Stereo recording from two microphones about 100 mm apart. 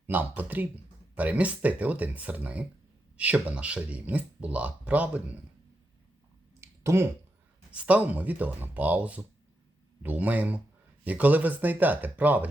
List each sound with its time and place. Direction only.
0.1 s speech: 15° right (ahead or behind)
6.6 s a sound: 30° right (ahead or behind)
7.7 s speech: 15° right (ahead or behind)